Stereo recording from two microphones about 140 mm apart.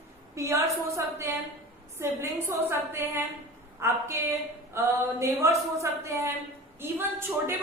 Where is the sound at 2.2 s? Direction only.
15° right (ahead or behind).